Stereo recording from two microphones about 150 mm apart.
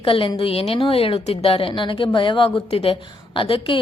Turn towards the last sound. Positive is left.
turn(degrees=35)  # may be behind; listen again after turning